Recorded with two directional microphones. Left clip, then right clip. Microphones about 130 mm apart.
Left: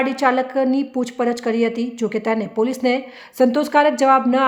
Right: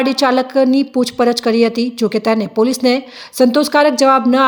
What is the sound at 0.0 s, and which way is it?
A woman's voice, 25° right (ahead or behind).